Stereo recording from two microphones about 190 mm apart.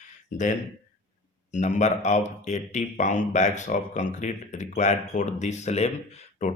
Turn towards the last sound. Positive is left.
turn(degrees=40)  # may be behind; listen again after turning